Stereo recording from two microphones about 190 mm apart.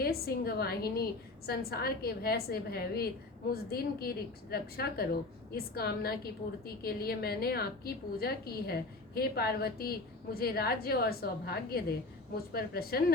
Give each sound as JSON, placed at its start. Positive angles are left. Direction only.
{"t": 0.0, "sound": "a woman's voice", "side_deg": 55}